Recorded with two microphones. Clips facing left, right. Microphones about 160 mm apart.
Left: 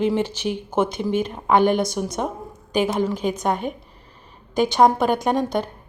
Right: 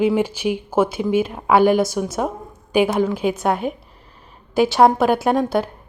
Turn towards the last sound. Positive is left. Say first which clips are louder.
# right 3 dB
turn(degrees=-5)  # may be behind; listen again after turning